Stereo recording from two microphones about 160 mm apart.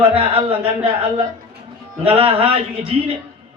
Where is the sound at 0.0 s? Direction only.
35° right (ahead or behind).